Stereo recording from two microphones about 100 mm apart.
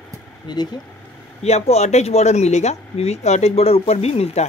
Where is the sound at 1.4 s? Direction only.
90° left.